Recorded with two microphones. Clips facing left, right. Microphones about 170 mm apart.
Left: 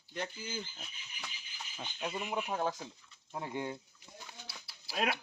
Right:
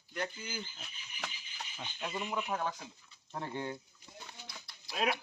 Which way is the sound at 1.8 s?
20° left (ahead or behind).